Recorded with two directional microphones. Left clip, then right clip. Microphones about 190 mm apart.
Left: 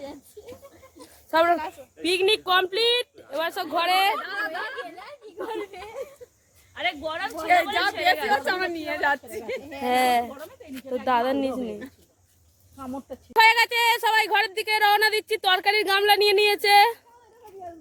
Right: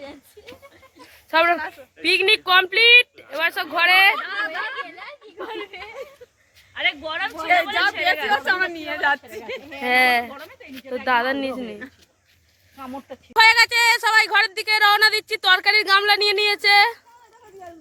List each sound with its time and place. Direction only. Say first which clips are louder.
0.4 s a sound: even; centre (ahead or behind)
1.3 s speech: right 3 dB; 20° right (ahead or behind)
1.5 s a woman's voice: right 2 dB; 5° right (ahead or behind)
4.2 s a sound: right 4 dB; 20° left (ahead or behind)
6.7 s a woman's voice: right 4 dB; 10° left (ahead or behind)
9.8 s a woman's voice: right 4 dB; 5° right (ahead or behind)
10.3 s a sound: right 2 dB; 25° left (ahead or behind)
10.8 s a woman's voice: right 3 dB; centre (ahead or behind)
13.1 s a woman's voice: right 3 dB; 20° left (ahead or behind); by 17.0 s 35° left (ahead or behind)